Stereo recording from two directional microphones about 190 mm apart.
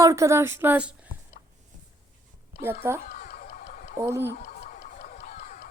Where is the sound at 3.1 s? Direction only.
55° left (ahead or behind).